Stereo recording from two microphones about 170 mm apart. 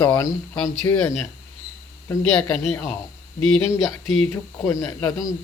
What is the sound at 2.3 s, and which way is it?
Speech, 5° left (ahead or behind).